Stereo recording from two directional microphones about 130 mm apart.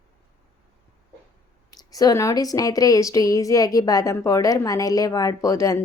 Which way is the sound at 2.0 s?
25° left (ahead or behind).